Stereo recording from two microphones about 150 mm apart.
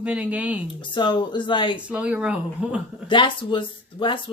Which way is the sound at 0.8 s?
30° left (ahead or behind).